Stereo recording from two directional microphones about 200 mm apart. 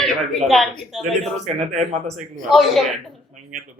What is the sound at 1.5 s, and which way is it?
Speech, 35° right (ahead or behind).